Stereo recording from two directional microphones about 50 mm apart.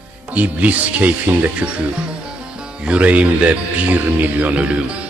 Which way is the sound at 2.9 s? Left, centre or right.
Right.